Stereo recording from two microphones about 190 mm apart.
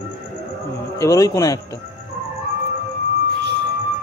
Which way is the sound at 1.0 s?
15° left (ahead or behind).